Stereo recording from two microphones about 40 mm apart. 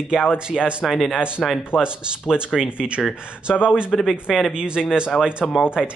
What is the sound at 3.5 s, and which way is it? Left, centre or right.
Speech, centre.